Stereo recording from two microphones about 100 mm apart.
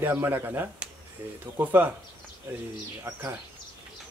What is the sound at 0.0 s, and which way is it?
Speech, 20° right (ahead or behind).